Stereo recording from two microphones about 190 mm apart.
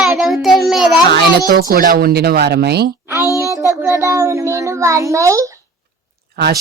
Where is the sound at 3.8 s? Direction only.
15° right (ahead or behind).